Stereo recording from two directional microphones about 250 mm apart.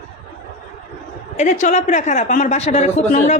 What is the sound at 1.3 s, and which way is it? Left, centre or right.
A woman's voice, left.